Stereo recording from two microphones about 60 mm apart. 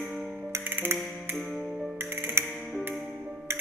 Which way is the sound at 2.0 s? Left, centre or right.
Right.